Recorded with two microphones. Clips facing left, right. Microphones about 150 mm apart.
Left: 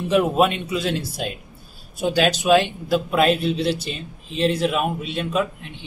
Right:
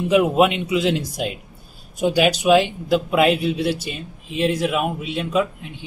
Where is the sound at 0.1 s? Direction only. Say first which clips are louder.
Right 2 dB; 10° right (ahead or behind).